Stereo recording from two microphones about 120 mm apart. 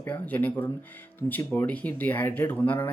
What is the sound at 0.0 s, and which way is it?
Speech, 15° left (ahead or behind).